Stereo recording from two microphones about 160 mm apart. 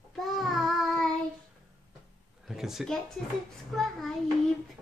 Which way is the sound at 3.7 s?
Centre (ahead or behind).